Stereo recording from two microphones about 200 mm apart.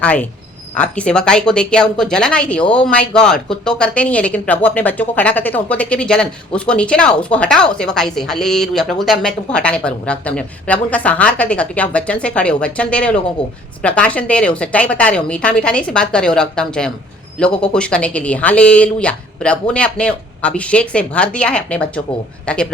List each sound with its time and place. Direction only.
0.0 s a woman's voice: 5° left (ahead or behind)